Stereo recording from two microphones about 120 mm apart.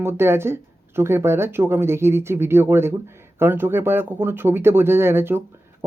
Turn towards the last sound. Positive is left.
turn(degrees=-20)  # may be behind; listen again after turning